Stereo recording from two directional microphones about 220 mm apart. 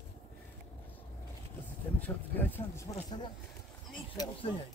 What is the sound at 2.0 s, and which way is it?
Speech, 10° left (ahead or behind).